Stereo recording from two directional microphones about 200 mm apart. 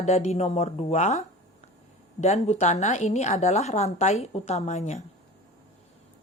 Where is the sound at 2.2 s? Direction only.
35° left (ahead or behind).